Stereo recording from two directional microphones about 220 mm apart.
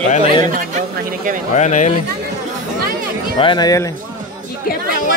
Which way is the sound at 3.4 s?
20° left (ahead or behind).